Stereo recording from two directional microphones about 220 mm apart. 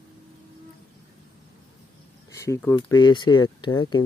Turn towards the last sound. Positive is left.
turn(degrees=20)  # may be behind; listen again after turning